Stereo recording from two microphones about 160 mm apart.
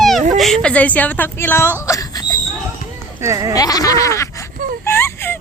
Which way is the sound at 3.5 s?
25° left (ahead or behind).